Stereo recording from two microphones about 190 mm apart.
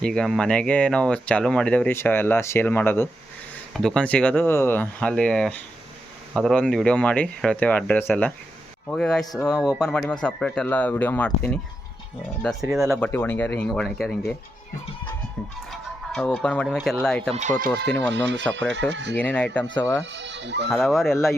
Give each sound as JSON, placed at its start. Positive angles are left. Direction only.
{"t": 0.0, "sound": "speech", "side_deg": 5}
{"t": 16.1, "sound": "speech", "side_deg": 5}
{"t": 18.1, "sound": "speech", "side_deg": -70}
{"t": 19.1, "sound": "speech", "side_deg": 10}
{"t": 19.6, "sound": "speech", "side_deg": 25}
{"t": 20.0, "sound": "speech", "side_deg": -70}
{"t": 20.7, "sound": "speech", "side_deg": 0}